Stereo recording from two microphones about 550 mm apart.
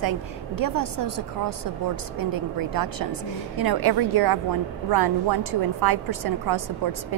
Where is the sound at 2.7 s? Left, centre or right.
Right.